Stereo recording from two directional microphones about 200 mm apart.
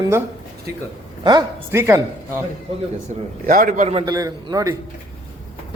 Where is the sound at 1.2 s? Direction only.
20° right (ahead or behind).